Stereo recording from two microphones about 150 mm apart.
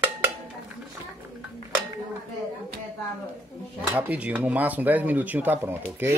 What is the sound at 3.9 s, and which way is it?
Speech, 10° right (ahead or behind).